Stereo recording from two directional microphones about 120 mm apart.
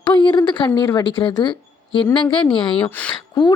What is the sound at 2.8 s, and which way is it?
Speech, 10° left (ahead or behind).